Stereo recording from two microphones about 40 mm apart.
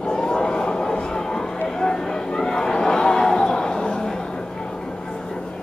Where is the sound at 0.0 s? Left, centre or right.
Centre.